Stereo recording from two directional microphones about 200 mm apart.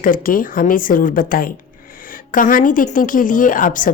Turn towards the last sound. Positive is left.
turn(degrees=40)  # may be behind; listen again after turning